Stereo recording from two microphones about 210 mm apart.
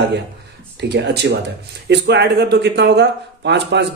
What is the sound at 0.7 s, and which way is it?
Speech, 55° right (ahead or behind).